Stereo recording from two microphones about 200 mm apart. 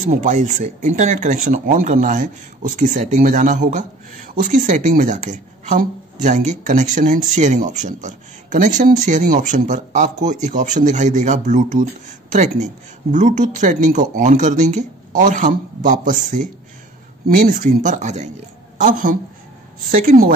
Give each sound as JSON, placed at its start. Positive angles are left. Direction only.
{"t": 0.1, "sound": "speech", "side_deg": -40}
{"t": 17.3, "sound": "a woman's voice", "side_deg": -45}